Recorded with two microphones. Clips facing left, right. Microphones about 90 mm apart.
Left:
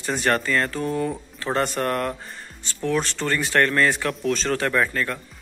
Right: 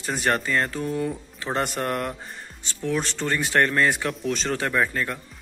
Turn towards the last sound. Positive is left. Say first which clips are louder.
# left 2 dB
turn(degrees=-15)  # may be behind; listen again after turning